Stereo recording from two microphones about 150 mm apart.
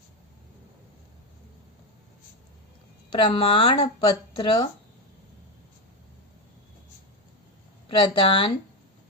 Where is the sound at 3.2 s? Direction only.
35° left (ahead or behind).